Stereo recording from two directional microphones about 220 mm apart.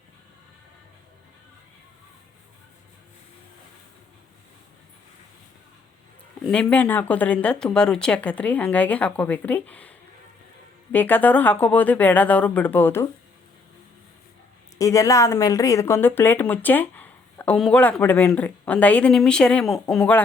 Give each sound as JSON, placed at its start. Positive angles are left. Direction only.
{"t": 6.5, "sound": "speech", "side_deg": 5}
{"t": 10.9, "sound": "speech", "side_deg": 10}
{"t": 14.8, "sound": "speech", "side_deg": 15}